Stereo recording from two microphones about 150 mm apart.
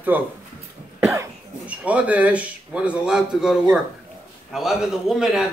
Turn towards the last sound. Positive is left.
turn(degrees=-5)  # may be behind; listen again after turning